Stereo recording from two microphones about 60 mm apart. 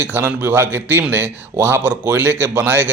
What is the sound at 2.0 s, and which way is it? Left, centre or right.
Speech, right.